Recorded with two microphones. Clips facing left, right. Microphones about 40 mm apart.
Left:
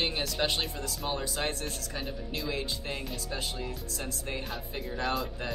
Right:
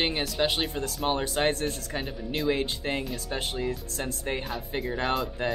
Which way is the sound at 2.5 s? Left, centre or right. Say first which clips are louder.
Right 6 dB; right.